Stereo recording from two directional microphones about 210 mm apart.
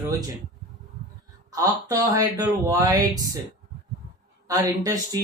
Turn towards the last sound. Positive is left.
turn(degrees=-15)  # may be behind; listen again after turning